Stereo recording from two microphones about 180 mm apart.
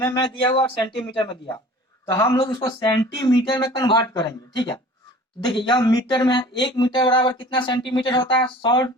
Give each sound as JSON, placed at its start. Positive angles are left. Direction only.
{"t": 0.0, "sound": "speech", "side_deg": 25}
{"t": 5.4, "sound": "speech", "side_deg": 25}